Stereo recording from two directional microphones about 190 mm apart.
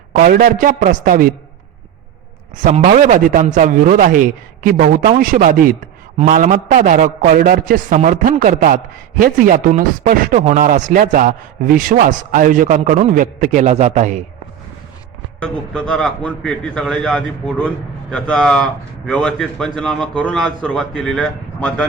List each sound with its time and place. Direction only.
0.1 s a man's voice: 50° right (ahead or behind)
2.6 s a man's voice: 40° right (ahead or behind)
15.4 s a man's voice: 5° left (ahead or behind)